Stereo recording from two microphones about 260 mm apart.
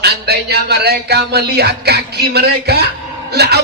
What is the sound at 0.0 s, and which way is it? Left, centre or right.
Speech, right.